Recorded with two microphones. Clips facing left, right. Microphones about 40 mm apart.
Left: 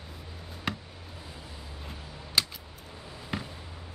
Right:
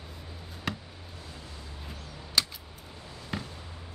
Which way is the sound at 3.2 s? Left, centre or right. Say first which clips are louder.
Left 1 dB; centre.